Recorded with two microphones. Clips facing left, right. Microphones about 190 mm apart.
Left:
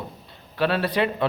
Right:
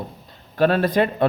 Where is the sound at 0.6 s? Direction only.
45° right (ahead or behind).